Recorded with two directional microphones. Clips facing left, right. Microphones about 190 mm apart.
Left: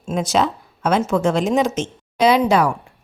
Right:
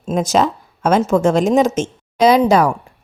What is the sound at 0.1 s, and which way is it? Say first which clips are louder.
A woman's voice: right 3 dB; 45° right (ahead or behind).